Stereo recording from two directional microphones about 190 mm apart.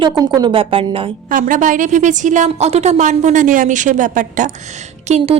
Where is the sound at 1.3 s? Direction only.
45° right (ahead or behind).